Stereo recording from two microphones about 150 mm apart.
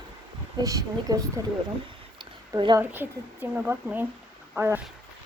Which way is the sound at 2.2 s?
30° right (ahead or behind).